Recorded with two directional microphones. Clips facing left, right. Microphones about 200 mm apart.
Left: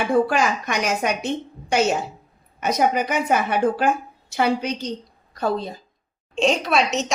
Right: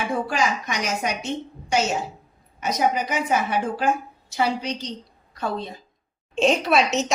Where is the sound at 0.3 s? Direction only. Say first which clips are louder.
Left 3 dB; 60° left (ahead or behind).